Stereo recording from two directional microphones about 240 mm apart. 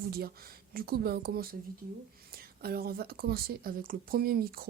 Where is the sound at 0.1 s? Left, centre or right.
Right.